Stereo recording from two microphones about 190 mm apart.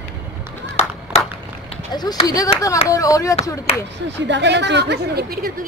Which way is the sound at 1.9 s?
20° left (ahead or behind).